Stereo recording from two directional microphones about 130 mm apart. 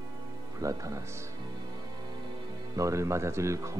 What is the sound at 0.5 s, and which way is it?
Speech, 25° right (ahead or behind).